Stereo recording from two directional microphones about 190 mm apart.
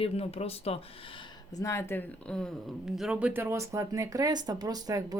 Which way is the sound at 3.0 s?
5° right (ahead or behind).